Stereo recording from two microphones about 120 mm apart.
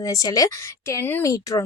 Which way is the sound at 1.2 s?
30° left (ahead or behind).